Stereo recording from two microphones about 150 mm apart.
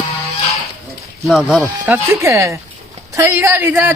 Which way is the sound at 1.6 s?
20° right (ahead or behind).